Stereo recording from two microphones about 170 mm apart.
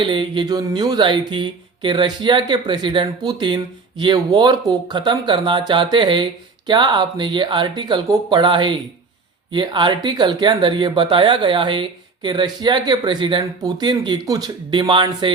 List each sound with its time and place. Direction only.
0.0 s speech: 30° right (ahead or behind)